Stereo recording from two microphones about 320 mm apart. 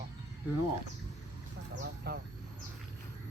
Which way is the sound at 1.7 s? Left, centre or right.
Right.